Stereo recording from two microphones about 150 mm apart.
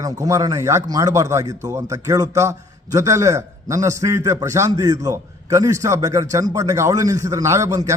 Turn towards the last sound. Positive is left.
turn(degrees=-20)  # may be behind; listen again after turning